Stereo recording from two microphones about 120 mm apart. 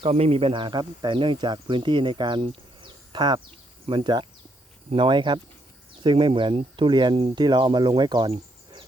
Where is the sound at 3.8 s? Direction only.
40° right (ahead or behind).